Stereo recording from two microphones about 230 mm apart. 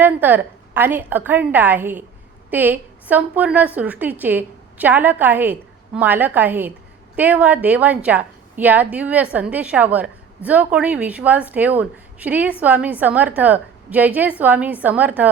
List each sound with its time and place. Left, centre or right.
0.0 s a woman's voice: centre